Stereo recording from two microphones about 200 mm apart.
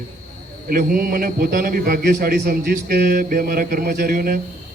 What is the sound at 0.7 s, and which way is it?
A man's voice, 45° right (ahead or behind).